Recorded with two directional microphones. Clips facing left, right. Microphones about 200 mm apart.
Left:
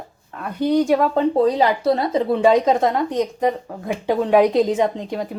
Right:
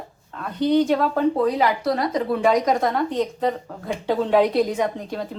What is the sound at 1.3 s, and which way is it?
Speech, 30° left (ahead or behind).